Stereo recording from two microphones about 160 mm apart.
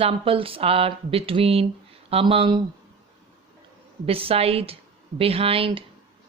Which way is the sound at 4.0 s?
35° right (ahead or behind).